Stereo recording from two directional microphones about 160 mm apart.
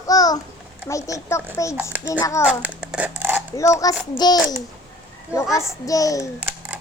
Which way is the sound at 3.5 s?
20° left (ahead or behind).